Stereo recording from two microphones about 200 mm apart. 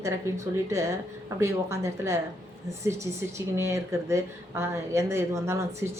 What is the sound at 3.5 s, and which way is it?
A woman's voice, 15° right (ahead or behind).